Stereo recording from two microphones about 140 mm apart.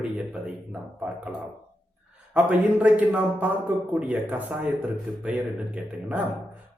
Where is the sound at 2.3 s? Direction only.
10° right (ahead or behind).